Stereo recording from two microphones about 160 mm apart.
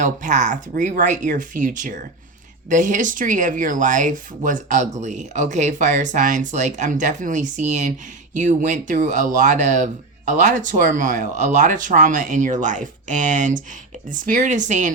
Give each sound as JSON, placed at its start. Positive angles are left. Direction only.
{"t": 0.0, "sound": "speech", "side_deg": -50}